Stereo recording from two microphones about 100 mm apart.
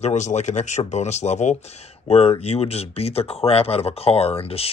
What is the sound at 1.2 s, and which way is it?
Speech, 70° left (ahead or behind).